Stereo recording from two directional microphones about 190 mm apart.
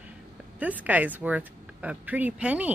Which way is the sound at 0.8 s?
10° right (ahead or behind).